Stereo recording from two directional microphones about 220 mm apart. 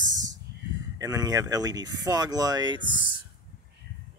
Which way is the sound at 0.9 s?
15° right (ahead or behind).